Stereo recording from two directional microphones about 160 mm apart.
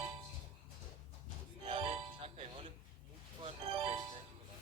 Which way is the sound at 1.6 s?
35° right (ahead or behind).